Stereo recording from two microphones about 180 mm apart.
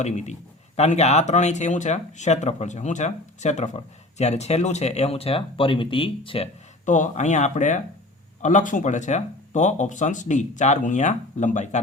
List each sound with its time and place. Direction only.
0.0 s speech: 40° left (ahead or behind)